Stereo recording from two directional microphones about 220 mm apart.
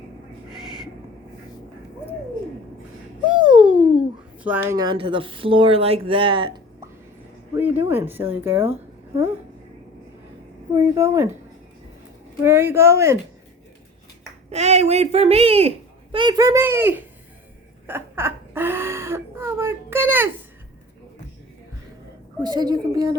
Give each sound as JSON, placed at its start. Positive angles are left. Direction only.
{"t": 0.5, "sound": "owl", "side_deg": 0}
{"t": 3.3, "sound": "a sound", "side_deg": -5}
{"t": 4.4, "sound": "speech", "side_deg": -10}
{"t": 7.5, "sound": "speech", "side_deg": -10}
{"t": 10.8, "sound": "speech", "side_deg": -15}
{"t": 12.4, "sound": "speech", "side_deg": -10}
{"t": 14.5, "sound": "speech", "side_deg": -30}
{"t": 17.8, "sound": "a sound", "side_deg": -10}
{"t": 22.4, "sound": "speech", "side_deg": -20}